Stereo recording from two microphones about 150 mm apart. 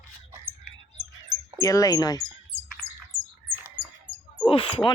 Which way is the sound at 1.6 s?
20° left (ahead or behind).